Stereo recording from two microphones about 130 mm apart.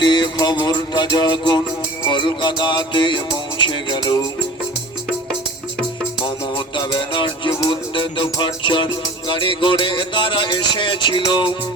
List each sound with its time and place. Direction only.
0.0 s mantra: 35° left (ahead or behind)
0.6 s music: 35° left (ahead or behind)
6.7 s music: 35° left (ahead or behind)